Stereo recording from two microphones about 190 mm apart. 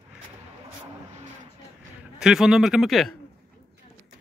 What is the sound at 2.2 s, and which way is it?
Speech, 5° right (ahead or behind).